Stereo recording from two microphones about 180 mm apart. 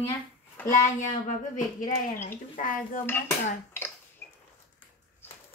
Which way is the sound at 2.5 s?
50° left (ahead or behind).